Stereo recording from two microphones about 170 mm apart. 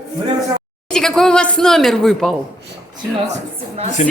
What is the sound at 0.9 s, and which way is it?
Speech, 5° left (ahead or behind).